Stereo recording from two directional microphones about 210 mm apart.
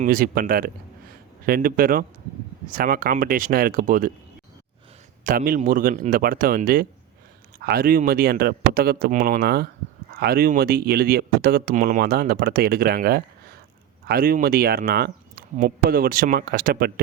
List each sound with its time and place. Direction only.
0.0 s speech: 40° right (ahead or behind)
5.2 s speech: 40° right (ahead or behind)